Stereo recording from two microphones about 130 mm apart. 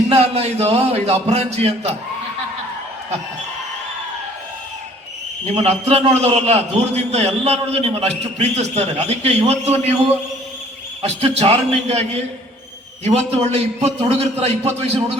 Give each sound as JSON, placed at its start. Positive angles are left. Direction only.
{"t": 0.1, "sound": "a man's voice", "side_deg": -55}
{"t": 5.5, "sound": "a man's voice", "side_deg": -55}
{"t": 11.0, "sound": "a man's voice", "side_deg": -55}